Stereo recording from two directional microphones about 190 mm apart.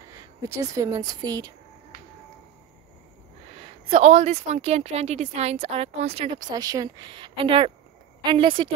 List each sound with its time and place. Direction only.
0.5 s speech: 15° right (ahead or behind)
3.9 s a woman's voice: 35° right (ahead or behind)